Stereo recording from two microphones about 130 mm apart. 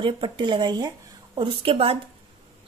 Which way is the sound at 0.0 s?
40° right (ahead or behind).